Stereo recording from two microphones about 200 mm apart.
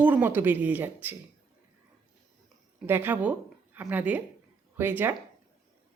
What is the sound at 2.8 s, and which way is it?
Speech, 10° right (ahead or behind).